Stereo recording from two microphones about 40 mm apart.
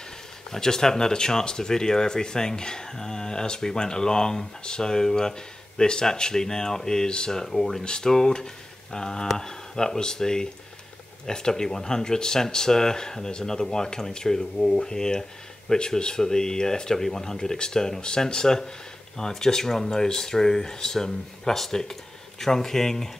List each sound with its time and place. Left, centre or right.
0.5 s speech: centre